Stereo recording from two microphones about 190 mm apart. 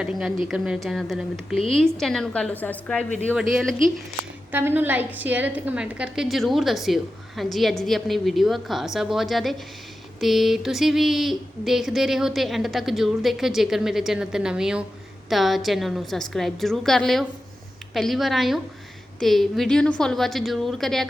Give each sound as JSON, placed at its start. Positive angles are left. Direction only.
{"t": 0.0, "sound": "a woman's voice", "side_deg": -5}
{"t": 4.5, "sound": "a woman's voice", "side_deg": -10}